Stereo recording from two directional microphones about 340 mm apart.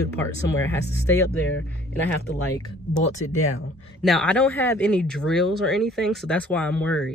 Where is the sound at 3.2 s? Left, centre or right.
Left.